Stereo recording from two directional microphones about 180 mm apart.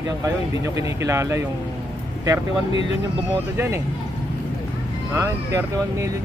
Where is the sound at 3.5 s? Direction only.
15° right (ahead or behind).